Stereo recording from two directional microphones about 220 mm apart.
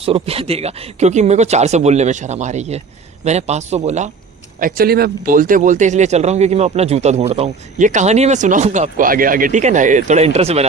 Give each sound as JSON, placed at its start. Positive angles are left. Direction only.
{"t": 0.0, "sound": "speech", "side_deg": -25}